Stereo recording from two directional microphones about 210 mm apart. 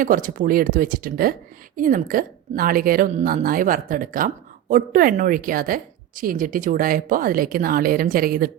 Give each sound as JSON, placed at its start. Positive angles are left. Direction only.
{"t": 0.0, "sound": "a woman's voice", "side_deg": -40}